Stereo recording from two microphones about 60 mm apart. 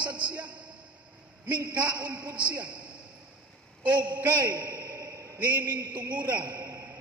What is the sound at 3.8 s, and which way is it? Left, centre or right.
A man's voice, right.